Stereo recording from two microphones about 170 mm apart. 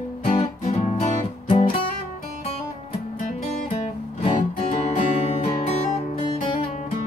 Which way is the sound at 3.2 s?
45° left (ahead or behind).